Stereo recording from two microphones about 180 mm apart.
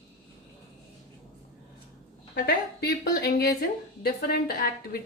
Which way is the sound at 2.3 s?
60° left (ahead or behind).